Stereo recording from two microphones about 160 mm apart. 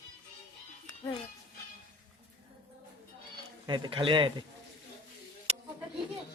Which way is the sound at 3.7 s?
35° right (ahead or behind).